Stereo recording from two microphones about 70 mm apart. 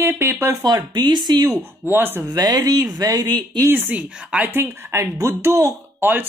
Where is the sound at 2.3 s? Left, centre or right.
Right.